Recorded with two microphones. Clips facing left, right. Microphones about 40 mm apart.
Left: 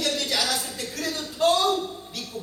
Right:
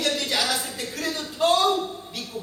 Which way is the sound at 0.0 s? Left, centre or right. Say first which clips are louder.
Right 1 dB; centre.